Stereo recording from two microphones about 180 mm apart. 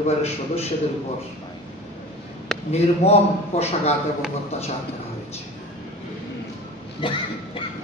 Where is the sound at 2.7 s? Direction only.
35° left (ahead or behind).